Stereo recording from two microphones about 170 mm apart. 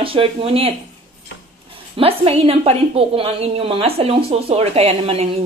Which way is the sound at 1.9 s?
35° right (ahead or behind).